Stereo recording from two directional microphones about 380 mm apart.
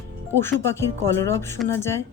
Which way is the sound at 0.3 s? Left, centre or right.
Centre.